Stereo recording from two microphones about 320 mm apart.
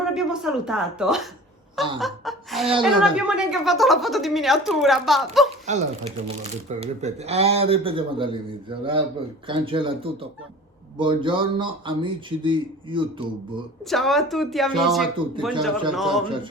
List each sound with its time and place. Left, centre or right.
0.0 s a woman's voice: centre
5.7 s a man's voice: right
13.9 s a woman's voice: centre